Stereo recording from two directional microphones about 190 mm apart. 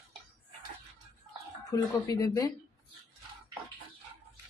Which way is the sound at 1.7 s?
20° left (ahead or behind).